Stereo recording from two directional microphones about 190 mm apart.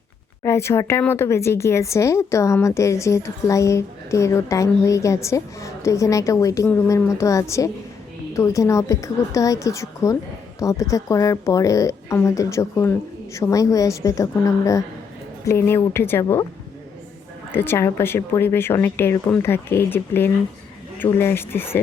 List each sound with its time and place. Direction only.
0.4 s a woman's voice: 15° left (ahead or behind)
17.5 s a woman's voice: 10° left (ahead or behind)